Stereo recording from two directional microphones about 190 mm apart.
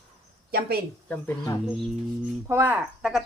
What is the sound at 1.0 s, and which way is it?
Speech, 10° left (ahead or behind).